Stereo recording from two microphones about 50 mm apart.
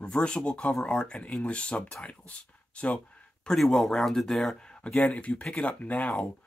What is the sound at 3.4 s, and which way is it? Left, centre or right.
Speech, centre.